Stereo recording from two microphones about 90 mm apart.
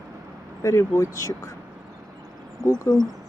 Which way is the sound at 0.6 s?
35° left (ahead or behind).